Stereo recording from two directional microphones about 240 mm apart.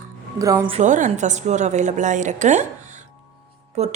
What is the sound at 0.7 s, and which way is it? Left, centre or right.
A woman's voice, right.